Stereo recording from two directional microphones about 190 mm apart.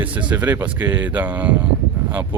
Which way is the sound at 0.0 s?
10° right (ahead or behind).